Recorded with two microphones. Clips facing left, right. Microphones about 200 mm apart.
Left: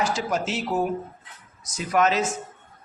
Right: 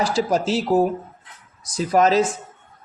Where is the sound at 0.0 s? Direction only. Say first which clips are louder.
Right 5 dB; 35° right (ahead or behind).